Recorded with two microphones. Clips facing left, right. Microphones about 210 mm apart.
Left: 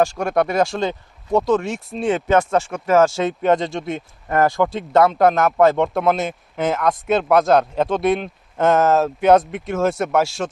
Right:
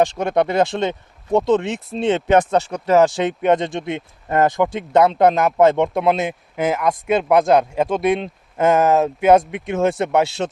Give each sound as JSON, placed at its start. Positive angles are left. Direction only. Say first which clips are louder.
{"t": 0.0, "sound": "speech", "louder": "right 1 dB", "side_deg": -20}
{"t": 3.5, "sound": "speech", "louder": "right 1 dB", "side_deg": 0}
{"t": 3.8, "sound": "speech", "louder": "right 1 dB", "side_deg": -20}
{"t": 5.8, "sound": "speech", "louder": "right 1 dB", "side_deg": 0}
{"t": 8.5, "sound": "speech", "louder": "right 1 dB", "side_deg": -10}
{"t": 9.2, "sound": "speech", "louder": "even", "side_deg": 0}
{"t": 9.5, "sound": "speech", "louder": "right 1 dB", "side_deg": -15}
{"t": 10.4, "sound": "speech", "louder": "right 2 dB", "side_deg": -30}